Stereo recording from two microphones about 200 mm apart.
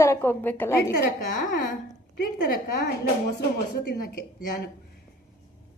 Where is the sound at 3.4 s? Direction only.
50° left (ahead or behind).